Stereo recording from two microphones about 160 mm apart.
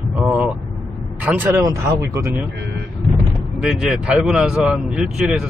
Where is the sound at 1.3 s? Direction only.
5° right (ahead or behind).